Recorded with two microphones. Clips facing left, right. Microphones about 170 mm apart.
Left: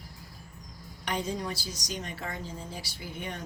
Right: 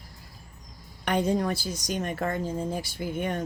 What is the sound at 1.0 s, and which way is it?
Speech, 55° right (ahead or behind).